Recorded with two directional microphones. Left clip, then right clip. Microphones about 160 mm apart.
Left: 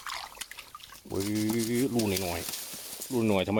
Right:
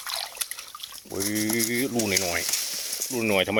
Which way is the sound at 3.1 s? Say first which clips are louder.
Right 3 dB; 20° left (ahead or behind).